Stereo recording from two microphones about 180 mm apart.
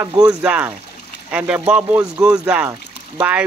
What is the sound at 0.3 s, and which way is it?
Speech, 5° right (ahead or behind).